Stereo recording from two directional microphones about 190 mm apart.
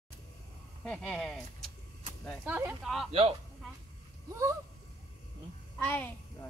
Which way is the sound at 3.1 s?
30° right (ahead or behind).